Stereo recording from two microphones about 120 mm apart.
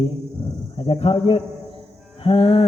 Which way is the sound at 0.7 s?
55° left (ahead or behind).